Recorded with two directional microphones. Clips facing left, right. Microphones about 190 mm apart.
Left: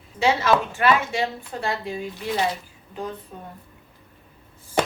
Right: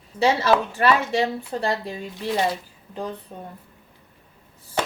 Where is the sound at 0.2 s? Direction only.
35° right (ahead or behind).